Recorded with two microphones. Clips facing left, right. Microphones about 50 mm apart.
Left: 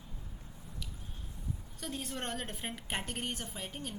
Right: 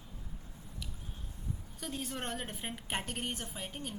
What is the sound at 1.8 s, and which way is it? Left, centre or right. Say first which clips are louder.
A woman's voice: even; centre.